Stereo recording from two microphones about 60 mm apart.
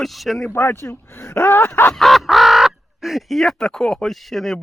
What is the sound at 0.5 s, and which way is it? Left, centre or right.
Speech, left.